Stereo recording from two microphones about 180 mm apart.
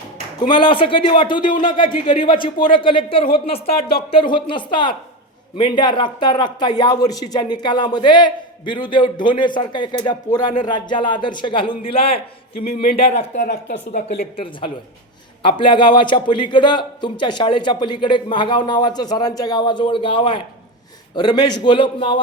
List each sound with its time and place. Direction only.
0.4 s a man's voice: 25° left (ahead or behind)
1.5 s speech: 50° left (ahead or behind)
2.2 s a man's voice: 30° left (ahead or behind)
12.6 s speech: 55° left (ahead or behind)
13.0 s speech: 35° left (ahead or behind)
13.5 s speech: 70° left (ahead or behind)
14.3 s a man's voice: 30° left (ahead or behind)